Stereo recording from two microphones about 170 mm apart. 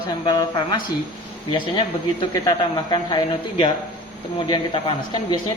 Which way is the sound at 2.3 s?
25° left (ahead or behind).